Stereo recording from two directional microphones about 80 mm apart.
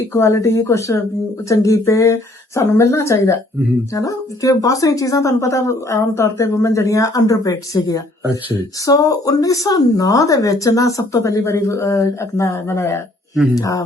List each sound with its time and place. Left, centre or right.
0.1 s a woman's voice: left
13.6 s a woman's voice: left